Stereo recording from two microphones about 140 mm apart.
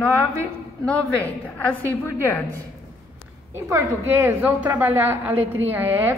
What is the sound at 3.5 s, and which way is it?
A woman's voice, 20° right (ahead or behind).